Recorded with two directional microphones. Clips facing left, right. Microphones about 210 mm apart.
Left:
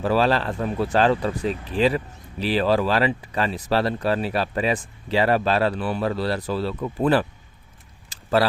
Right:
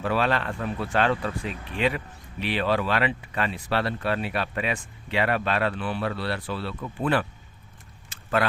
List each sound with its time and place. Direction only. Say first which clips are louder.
0.0 s speech: left 5 dB; 35° left (ahead or behind)